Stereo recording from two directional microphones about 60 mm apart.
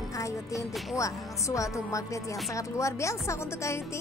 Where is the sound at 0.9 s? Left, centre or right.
Left.